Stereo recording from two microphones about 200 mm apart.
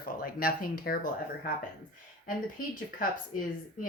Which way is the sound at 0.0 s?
45° left (ahead or behind).